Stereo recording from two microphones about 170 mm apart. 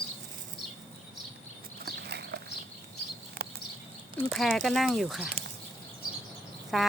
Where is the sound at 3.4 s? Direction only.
70° right (ahead or behind).